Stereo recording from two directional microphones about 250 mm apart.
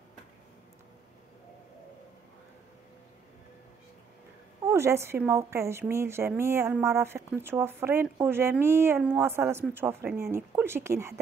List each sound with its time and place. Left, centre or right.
4.6 s speech: centre